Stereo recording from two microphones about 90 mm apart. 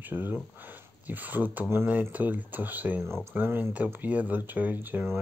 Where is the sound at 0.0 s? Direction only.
20° right (ahead or behind).